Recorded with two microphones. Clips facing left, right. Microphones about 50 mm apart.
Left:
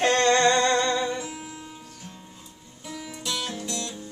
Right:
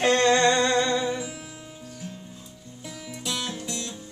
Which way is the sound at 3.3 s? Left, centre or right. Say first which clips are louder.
Even; centre.